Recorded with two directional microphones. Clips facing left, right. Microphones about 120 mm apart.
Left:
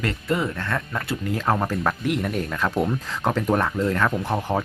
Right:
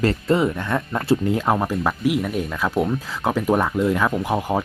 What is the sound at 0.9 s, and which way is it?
Speech, 25° right (ahead or behind).